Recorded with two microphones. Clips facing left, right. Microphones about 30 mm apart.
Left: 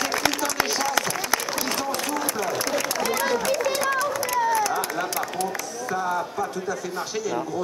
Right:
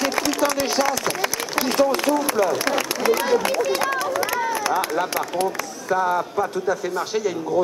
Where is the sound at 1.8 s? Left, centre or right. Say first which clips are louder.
Right 8 dB; centre.